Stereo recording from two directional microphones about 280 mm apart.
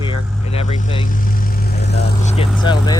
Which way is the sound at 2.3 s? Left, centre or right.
Centre.